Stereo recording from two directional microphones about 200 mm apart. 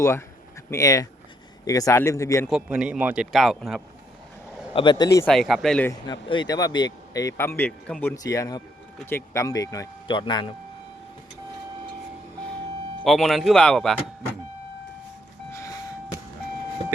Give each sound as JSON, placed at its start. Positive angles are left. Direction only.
{"t": 0.0, "sound": "speech", "side_deg": 15}
{"t": 2.5, "sound": "speech", "side_deg": -5}
{"t": 4.7, "sound": "speech", "side_deg": 25}
{"t": 5.3, "sound": "speech", "side_deg": 0}
{"t": 5.9, "sound": "speech", "side_deg": 20}
{"t": 13.1, "sound": "speech", "side_deg": 0}
{"t": 15.5, "sound": "vehicle", "side_deg": 15}